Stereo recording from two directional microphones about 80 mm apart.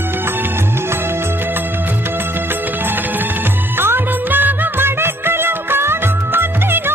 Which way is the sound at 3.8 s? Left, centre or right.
Right.